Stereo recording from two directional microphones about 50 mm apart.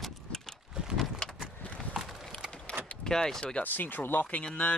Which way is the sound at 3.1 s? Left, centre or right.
Centre.